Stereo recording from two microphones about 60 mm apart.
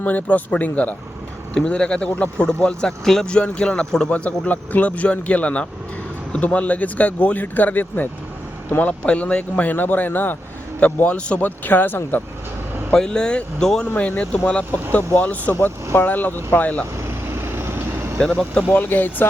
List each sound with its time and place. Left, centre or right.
0.0 s speech: left
4.1 s speech: left
11.6 s speech: left
12.9 s speech: centre
13.8 s speech: left
17.0 s vehicle: right
18.2 s speech: centre
18.7 s speech: left